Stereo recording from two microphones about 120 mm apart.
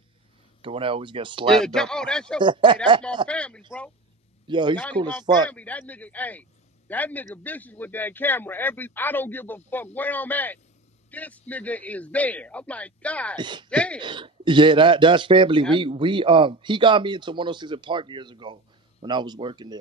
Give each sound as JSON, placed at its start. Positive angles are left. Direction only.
{"t": 0.6, "sound": "a man's voice", "side_deg": -45}
{"t": 1.6, "sound": "speech", "side_deg": 5}
{"t": 2.4, "sound": "speech", "side_deg": -40}
{"t": 3.3, "sound": "a man's voice", "side_deg": 10}
{"t": 4.5, "sound": "a man's voice", "side_deg": -40}
{"t": 5.5, "sound": "a man's voice", "side_deg": 10}
{"t": 13.4, "sound": "speech", "side_deg": -40}
{"t": 13.7, "sound": "a man's voice", "side_deg": 10}
{"t": 14.0, "sound": "a man's voice", "side_deg": -40}